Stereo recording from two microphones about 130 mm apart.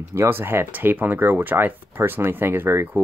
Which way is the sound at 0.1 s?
20° right (ahead or behind).